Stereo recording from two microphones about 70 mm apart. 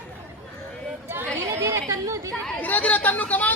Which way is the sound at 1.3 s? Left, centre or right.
Right.